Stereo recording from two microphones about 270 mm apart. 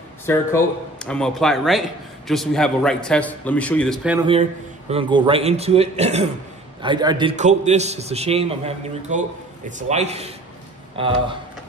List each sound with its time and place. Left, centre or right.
0.3 s speech: centre
4.2 s a man's voice: right